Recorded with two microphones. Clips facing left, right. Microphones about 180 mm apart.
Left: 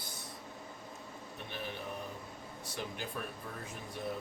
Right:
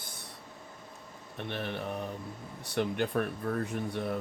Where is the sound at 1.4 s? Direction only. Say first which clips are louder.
Right 7 dB; 65° right (ahead or behind).